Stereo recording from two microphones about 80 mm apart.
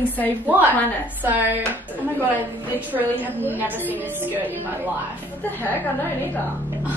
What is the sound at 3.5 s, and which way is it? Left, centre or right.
Speech, right.